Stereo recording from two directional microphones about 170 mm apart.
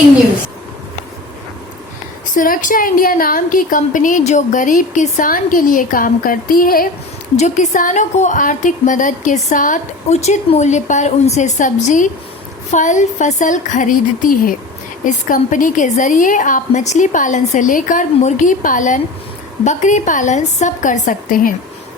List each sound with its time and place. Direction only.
2.3 s a woman's voice: 50° left (ahead or behind)
7.3 s a woman's voice: 45° left (ahead or behind)